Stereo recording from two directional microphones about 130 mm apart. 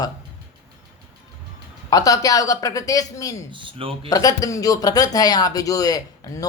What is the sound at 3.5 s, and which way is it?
Speech, 40° right (ahead or behind).